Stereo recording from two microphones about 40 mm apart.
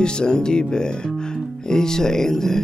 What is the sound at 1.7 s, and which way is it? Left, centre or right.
Speech, centre.